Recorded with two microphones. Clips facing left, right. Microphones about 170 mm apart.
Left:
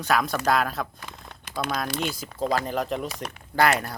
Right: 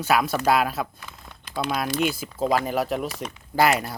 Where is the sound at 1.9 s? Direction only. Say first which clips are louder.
Right 4 dB; 10° right (ahead or behind).